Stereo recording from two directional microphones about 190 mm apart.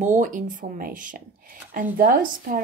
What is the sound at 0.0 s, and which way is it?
A woman's voice, 40° right (ahead or behind).